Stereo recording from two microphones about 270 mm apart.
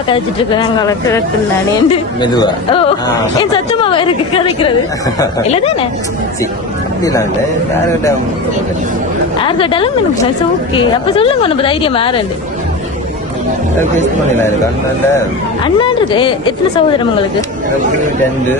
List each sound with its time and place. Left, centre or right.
0.1 s a woman's voice: centre
7.0 s speech: centre
9.4 s a woman's voice: centre
15.6 s speech: centre